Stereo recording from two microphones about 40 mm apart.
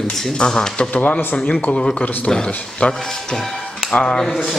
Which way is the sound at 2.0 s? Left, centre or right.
Left.